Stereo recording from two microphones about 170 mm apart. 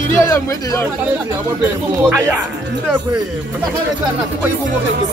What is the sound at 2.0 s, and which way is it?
Speech, 10° right (ahead or behind).